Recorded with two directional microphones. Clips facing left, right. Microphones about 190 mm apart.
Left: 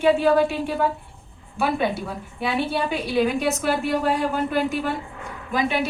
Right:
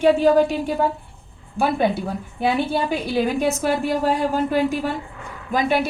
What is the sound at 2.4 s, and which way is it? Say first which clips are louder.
A woman's voice: right 3 dB; 30° right (ahead or behind).